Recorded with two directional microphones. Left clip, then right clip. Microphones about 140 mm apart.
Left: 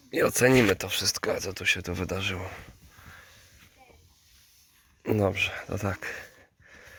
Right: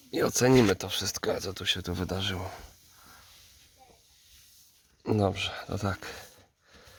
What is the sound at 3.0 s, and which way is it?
Sniff, 5° right (ahead or behind).